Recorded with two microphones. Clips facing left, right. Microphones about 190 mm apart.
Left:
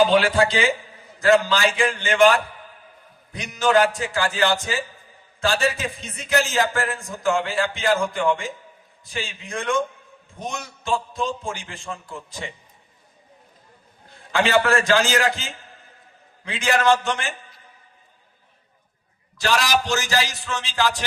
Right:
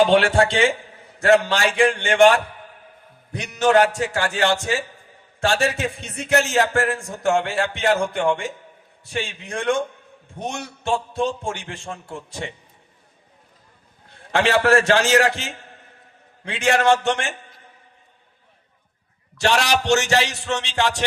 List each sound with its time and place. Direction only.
0.1 s a man's voice: 65° right (ahead or behind)
3.3 s speech: 65° right (ahead or behind)
14.3 s speech: 65° right (ahead or behind)
19.4 s music: 25° right (ahead or behind)
19.6 s speech: 70° right (ahead or behind)
19.9 s music: 25° right (ahead or behind)